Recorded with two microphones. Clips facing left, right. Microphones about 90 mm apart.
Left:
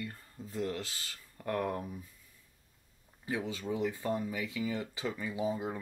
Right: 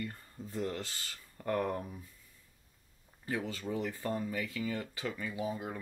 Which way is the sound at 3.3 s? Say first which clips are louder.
Left 1 dB; 15° left (ahead or behind).